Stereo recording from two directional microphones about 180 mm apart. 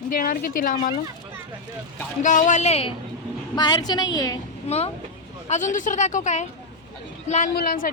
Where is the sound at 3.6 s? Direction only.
25° left (ahead or behind).